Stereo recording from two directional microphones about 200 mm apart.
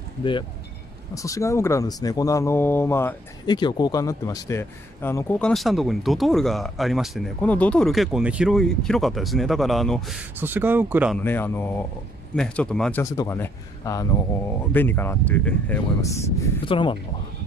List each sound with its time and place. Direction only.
0.2 s speech: 25° left (ahead or behind); by 11.1 s 10° right (ahead or behind)
11.1 s speech: 10° left (ahead or behind)
13.0 s speech: 15° left (ahead or behind)
16.6 s speech: 25° left (ahead or behind)